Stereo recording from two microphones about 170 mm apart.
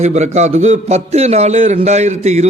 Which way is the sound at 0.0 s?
40° right (ahead or behind).